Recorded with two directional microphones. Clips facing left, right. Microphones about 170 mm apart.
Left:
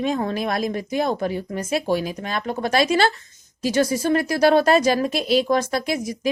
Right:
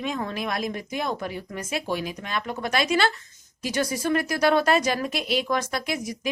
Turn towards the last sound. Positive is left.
turn(degrees=35)  # may be behind; listen again after turning